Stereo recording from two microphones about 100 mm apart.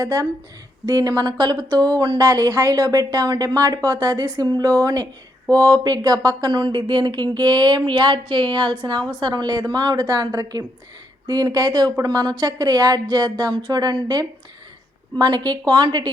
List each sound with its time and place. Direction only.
0.0 s speech: 35° right (ahead or behind)